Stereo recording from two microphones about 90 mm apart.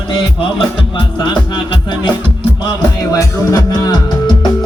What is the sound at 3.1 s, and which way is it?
Music, 40° left (ahead or behind).